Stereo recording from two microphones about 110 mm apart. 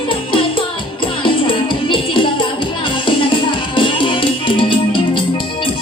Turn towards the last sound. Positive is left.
turn(degrees=50)  # may be behind; listen again after turning